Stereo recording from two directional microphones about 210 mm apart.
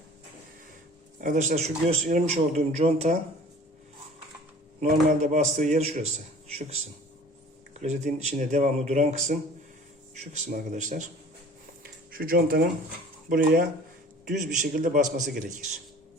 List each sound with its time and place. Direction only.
1.2 s a man's voice: 35° right (ahead or behind)
4.8 s a man's voice: 35° right (ahead or behind)
7.7 s a man's voice: 30° right (ahead or behind)
10.5 s a man's voice: 35° right (ahead or behind)
11.8 s a sound: 45° right (ahead or behind)
13.3 s a man's voice: 40° right (ahead or behind)